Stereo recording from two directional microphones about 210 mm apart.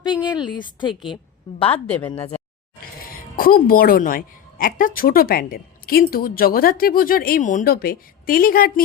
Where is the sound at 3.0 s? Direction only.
45° left (ahead or behind).